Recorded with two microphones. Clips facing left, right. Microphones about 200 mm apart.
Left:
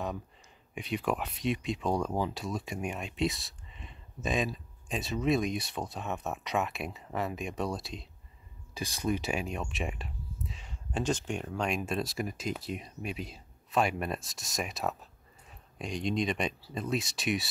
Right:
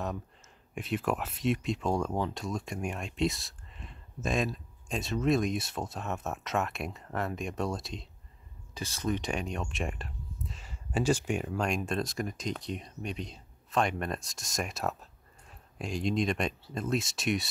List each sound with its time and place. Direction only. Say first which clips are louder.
0.7 s speech: right 1 dB; centre (ahead or behind)
8.7 s speech: left 1 dB; 10° left (ahead or behind)